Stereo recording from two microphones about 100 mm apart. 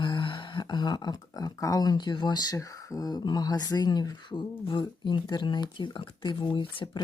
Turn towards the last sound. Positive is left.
turn(degrees=50)  # may be behind; listen again after turning